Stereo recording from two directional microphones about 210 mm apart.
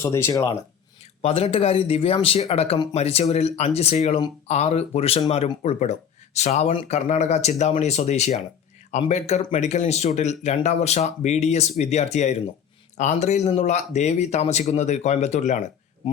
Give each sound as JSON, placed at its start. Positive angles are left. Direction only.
{"t": 0.0, "sound": "speech", "side_deg": 15}
{"t": 1.2, "sound": "speech", "side_deg": 25}